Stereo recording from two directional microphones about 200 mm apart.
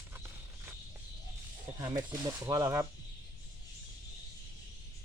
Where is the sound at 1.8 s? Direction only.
15° right (ahead or behind).